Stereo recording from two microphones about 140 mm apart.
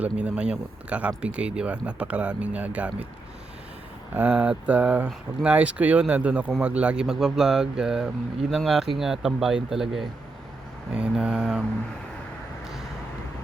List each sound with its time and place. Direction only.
0.0 s speech: 10° right (ahead or behind)
4.1 s speech: 10° right (ahead or behind)